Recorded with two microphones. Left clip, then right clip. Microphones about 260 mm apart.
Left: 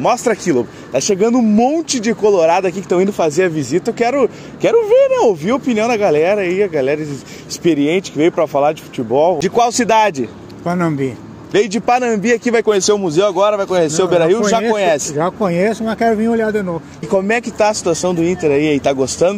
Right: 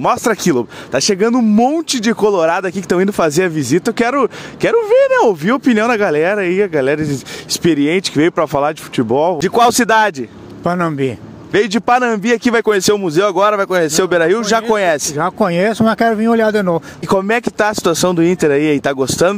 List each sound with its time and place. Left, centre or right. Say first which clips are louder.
0.0 s speech: even; right